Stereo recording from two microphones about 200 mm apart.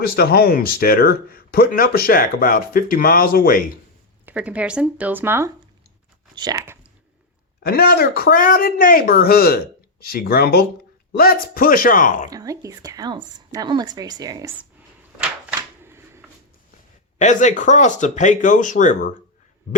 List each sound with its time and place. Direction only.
0.0 s speech: 50° left (ahead or behind)
4.3 s speech: 5° right (ahead or behind)
7.6 s speech: 50° left (ahead or behind)
12.3 s speech: 15° right (ahead or behind)
15.8 s shuffling cards: 10° right (ahead or behind)
17.2 s speech: 35° left (ahead or behind)